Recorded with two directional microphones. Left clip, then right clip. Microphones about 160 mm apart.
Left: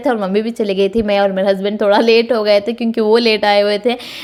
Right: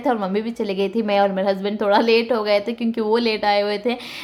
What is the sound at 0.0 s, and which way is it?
A woman's voice, 20° left (ahead or behind).